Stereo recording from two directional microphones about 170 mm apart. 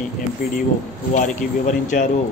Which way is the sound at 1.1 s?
50° left (ahead or behind).